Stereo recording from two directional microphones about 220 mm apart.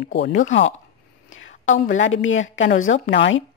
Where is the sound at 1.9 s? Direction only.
60° left (ahead or behind).